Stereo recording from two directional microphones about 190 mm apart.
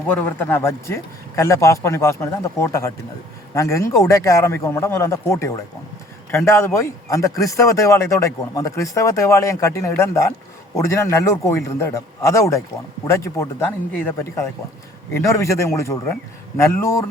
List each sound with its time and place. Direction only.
0.1 s speech: 10° left (ahead or behind)